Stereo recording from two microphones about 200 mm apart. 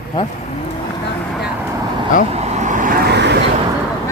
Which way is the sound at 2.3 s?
35° right (ahead or behind).